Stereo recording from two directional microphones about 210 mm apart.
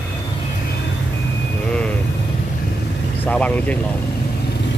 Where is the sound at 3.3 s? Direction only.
5° left (ahead or behind).